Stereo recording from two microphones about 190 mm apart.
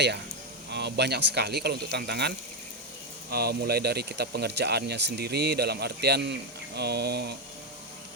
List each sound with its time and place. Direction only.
0.7 s speech: 60° right (ahead or behind)